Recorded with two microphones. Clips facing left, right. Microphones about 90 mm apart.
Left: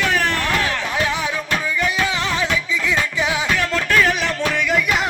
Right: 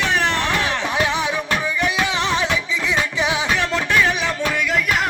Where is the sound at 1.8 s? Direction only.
25° right (ahead or behind).